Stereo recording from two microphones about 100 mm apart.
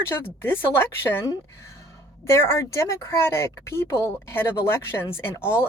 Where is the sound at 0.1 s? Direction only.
20° left (ahead or behind).